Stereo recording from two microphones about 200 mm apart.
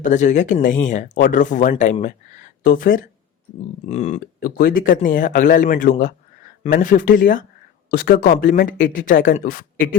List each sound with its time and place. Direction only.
0.0 s speech: 40° left (ahead or behind)
4.5 s speech: 45° left (ahead or behind)